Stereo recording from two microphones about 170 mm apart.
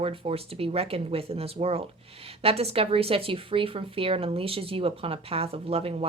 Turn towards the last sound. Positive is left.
turn(degrees=-35)  # may be behind; listen again after turning